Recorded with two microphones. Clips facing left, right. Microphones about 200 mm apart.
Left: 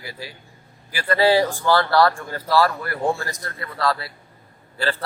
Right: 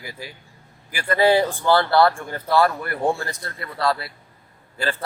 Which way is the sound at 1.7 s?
20° right (ahead or behind).